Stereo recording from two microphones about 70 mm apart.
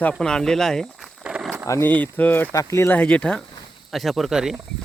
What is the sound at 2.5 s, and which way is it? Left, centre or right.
Speech, left.